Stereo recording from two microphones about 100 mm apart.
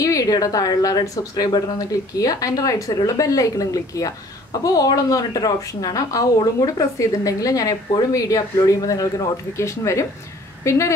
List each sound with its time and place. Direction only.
0.0 s a woman's voice: 35° left (ahead or behind)